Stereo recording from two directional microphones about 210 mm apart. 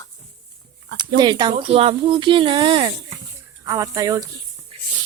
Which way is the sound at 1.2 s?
20° right (ahead or behind).